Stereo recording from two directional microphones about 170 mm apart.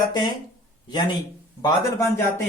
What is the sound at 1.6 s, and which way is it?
Speech, 15° left (ahead or behind).